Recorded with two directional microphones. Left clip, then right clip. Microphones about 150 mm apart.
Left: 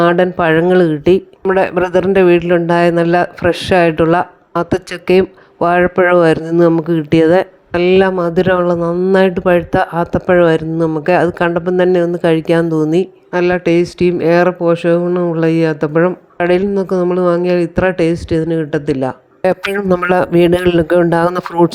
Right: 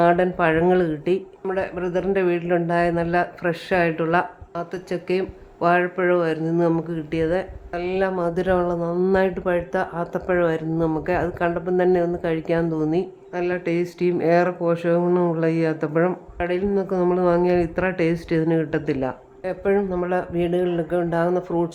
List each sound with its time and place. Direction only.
0.0 s speech: 35° left (ahead or behind)
8.9 s speech: 15° left (ahead or behind)
9.1 s speech: 40° left (ahead or behind)
16.4 s speech: 50° left (ahead or behind)
16.7 s speech: 35° left (ahead or behind)
19.4 s a man's voice: 90° left; by 21.7 s 65° left (ahead or behind)